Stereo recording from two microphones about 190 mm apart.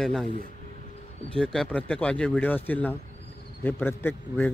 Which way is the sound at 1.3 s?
5° left (ahead or behind).